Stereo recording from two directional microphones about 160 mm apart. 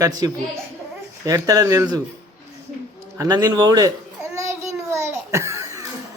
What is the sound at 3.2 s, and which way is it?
Speech, 25° right (ahead or behind).